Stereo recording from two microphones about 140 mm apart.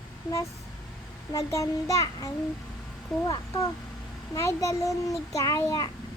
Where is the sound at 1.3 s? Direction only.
25° left (ahead or behind).